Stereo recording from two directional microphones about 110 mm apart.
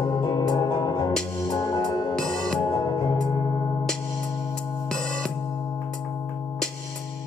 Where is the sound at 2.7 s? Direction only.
35° left (ahead or behind).